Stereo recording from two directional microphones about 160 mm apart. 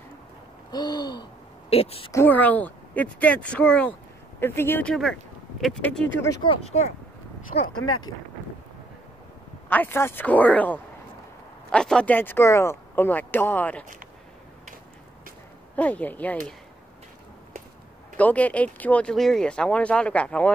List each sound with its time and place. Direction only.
0.7 s gasp: 25° left (ahead or behind)
1.7 s speech: 40° left (ahead or behind)
2.1 s speech: 10° left (ahead or behind)
6.4 s speech: 40° left (ahead or behind)
7.5 s speech: 60° left (ahead or behind)
9.7 s speech: 10° left (ahead or behind)
15.7 s speech: 10° left (ahead or behind)
18.1 s speech: 10° left (ahead or behind)